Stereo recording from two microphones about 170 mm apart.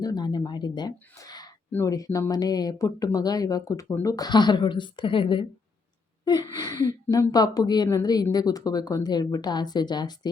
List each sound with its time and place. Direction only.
0.0 s a woman's voice: 25° left (ahead or behind)